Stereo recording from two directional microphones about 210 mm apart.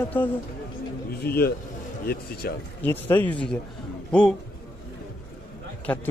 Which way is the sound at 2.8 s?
10° left (ahead or behind).